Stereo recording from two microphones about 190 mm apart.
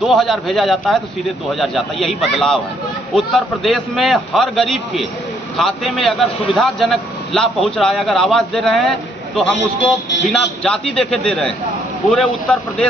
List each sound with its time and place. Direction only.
0.0 s a man's voice: centre (ahead or behind)
10.6 s a man's voice: 5° left (ahead or behind)